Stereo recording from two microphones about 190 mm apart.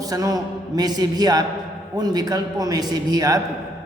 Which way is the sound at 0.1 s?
20° right (ahead or behind).